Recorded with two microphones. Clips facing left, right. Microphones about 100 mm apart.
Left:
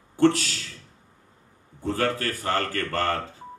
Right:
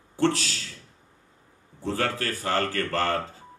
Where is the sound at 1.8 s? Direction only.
25° right (ahead or behind).